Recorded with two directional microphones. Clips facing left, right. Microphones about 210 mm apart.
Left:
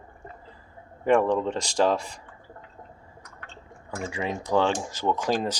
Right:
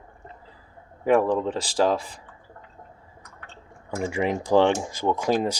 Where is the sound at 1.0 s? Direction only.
5° right (ahead or behind).